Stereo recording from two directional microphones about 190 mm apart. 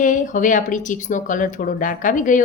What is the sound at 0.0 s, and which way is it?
A woman's voice, 40° left (ahead or behind).